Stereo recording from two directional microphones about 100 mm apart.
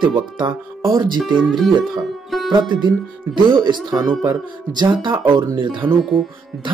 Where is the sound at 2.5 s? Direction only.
50° right (ahead or behind).